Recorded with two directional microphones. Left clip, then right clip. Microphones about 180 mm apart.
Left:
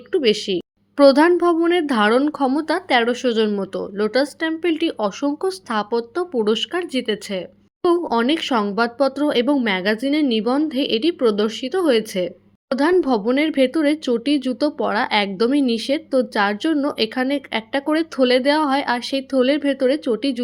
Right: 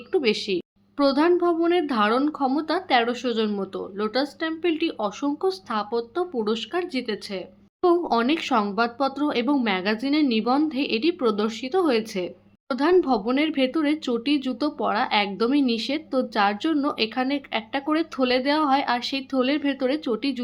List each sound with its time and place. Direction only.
0.1 s a woman's voice: 25° left (ahead or behind)
0.9 s speech: 35° left (ahead or behind)
7.9 s speech: 20° left (ahead or behind)